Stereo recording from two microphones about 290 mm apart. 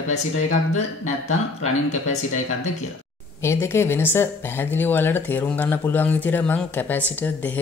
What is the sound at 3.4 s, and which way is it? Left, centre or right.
Speech, centre.